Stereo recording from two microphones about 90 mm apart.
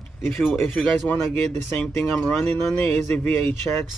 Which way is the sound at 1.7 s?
10° left (ahead or behind).